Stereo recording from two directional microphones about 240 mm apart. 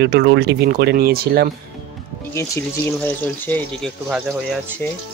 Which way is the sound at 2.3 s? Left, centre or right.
Centre.